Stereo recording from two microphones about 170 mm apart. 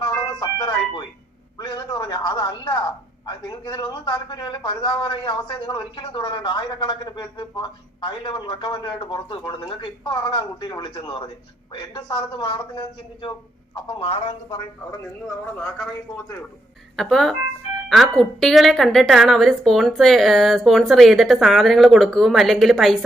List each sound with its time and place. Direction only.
0.0 s music: 25° left (ahead or behind)
1.5 s a man's voice: 25° left (ahead or behind)
17.0 s a woman's voice: centre (ahead or behind)